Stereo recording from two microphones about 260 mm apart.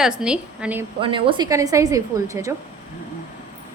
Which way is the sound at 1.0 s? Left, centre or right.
Centre.